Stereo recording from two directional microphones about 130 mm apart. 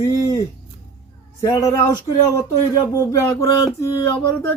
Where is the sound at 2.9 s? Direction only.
25° left (ahead or behind).